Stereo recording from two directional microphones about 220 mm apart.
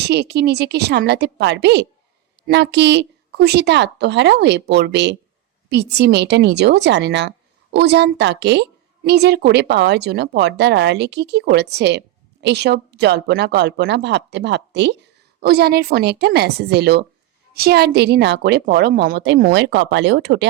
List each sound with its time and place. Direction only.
0.0 s a woman's voice: 50° right (ahead or behind)